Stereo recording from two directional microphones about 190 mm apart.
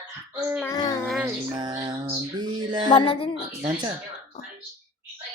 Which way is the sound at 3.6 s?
25° right (ahead or behind).